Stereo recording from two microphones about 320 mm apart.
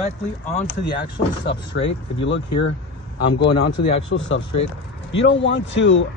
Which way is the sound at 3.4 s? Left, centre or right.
Left.